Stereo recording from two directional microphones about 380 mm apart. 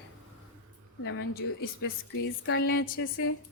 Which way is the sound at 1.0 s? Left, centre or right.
Left.